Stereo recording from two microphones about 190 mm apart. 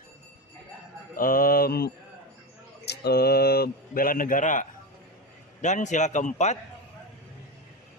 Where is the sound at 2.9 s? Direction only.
60° left (ahead or behind); by 6.6 s 35° left (ahead or behind).